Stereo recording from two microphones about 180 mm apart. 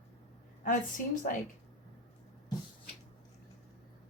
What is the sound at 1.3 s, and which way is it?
Speech, 50° left (ahead or behind).